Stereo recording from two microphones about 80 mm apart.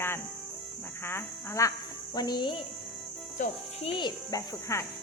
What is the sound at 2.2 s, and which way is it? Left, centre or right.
Speech, left.